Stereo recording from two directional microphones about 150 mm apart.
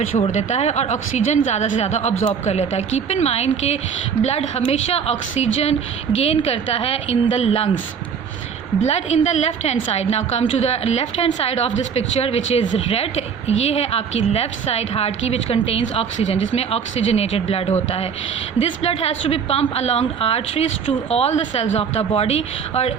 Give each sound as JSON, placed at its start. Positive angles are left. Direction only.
{"t": 0.2, "sound": "a woman's voice", "side_deg": 45}
{"t": 8.9, "sound": "a woman's voice", "side_deg": 45}